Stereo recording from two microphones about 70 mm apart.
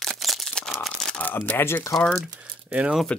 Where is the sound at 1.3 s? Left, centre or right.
Left.